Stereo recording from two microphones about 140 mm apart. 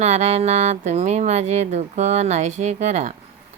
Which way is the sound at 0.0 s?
55° right (ahead or behind).